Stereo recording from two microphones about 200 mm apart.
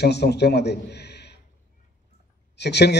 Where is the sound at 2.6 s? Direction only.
55° left (ahead or behind).